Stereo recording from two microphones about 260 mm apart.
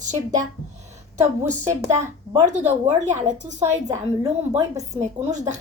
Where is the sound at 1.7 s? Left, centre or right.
Centre.